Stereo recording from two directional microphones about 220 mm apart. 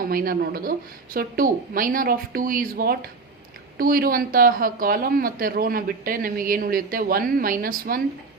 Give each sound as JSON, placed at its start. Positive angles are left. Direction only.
{"t": 0.0, "sound": "a woman's voice", "side_deg": -40}